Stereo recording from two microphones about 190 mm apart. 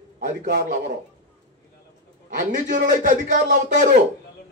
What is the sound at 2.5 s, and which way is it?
A man's voice, 45° right (ahead or behind).